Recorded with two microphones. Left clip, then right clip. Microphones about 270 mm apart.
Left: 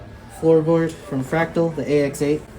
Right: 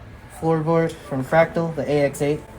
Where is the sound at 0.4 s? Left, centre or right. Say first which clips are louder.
Left 6 dB; right.